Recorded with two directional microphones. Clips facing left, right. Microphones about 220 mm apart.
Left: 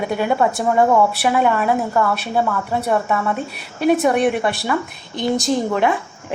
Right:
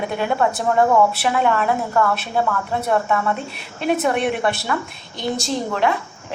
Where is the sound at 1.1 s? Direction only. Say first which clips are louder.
Left 2 dB; 5° left (ahead or behind).